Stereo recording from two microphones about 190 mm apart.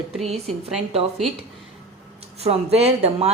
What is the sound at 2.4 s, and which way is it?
Speech, 35° right (ahead or behind).